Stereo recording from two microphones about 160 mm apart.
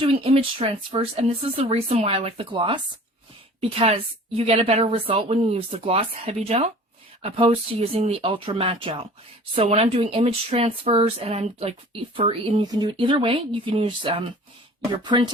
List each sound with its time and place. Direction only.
0.0 s a woman's voice: 35° right (ahead or behind)
12.6 s a woman's voice: 25° right (ahead or behind)